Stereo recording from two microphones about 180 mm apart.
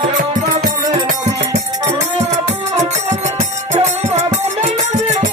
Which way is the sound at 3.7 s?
40° right (ahead or behind).